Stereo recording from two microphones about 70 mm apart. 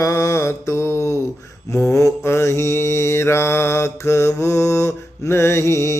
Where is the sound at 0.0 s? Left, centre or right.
Left.